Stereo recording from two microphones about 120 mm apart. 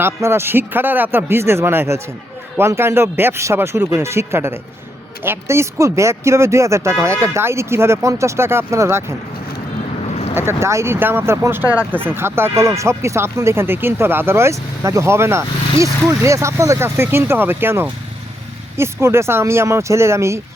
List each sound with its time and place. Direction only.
0.0 s speech: 20° right (ahead or behind)
10.3 s speech: 20° right (ahead or behind)